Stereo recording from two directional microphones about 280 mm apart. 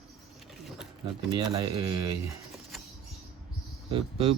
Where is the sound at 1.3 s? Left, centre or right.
Centre.